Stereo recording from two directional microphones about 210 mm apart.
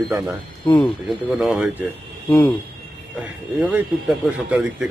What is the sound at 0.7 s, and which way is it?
Speech, 20° left (ahead or behind).